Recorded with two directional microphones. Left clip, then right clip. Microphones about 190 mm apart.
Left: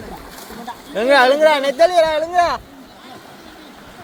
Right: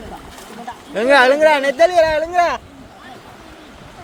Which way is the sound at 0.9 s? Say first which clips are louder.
Right 1 dB; 20° right (ahead or behind).